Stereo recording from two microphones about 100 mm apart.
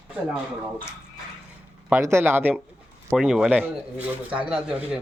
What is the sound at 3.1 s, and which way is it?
A man's voice, 5° right (ahead or behind).